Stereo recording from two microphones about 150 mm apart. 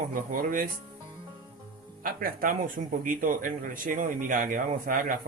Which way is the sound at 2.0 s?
70° right (ahead or behind).